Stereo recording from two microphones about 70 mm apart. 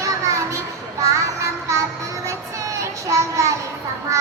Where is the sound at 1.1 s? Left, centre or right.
Right.